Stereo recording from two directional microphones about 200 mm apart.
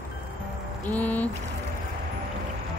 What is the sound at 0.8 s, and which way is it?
Speech, 10° left (ahead or behind).